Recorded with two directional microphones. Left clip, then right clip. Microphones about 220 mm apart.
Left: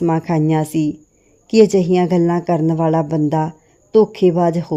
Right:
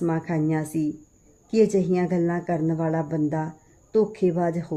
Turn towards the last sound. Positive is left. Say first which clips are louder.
# left 9 dB
turn(degrees=35)  # may be behind; listen again after turning